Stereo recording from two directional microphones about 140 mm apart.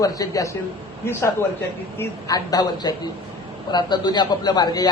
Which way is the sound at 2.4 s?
30° left (ahead or behind).